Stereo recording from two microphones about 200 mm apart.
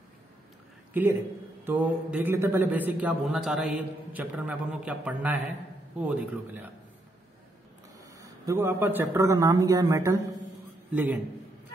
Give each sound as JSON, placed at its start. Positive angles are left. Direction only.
{"t": 1.7, "sound": "a man's voice", "side_deg": -10}
{"t": 8.2, "sound": "a man's voice", "side_deg": -15}